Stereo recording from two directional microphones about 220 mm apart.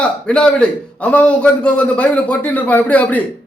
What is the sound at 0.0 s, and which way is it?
A man's voice, 5° left (ahead or behind).